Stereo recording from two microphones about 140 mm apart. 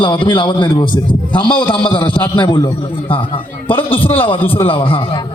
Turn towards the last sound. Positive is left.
turn(degrees=40)  # may be behind; listen again after turning